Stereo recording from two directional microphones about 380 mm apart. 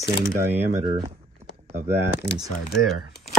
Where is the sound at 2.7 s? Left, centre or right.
Centre.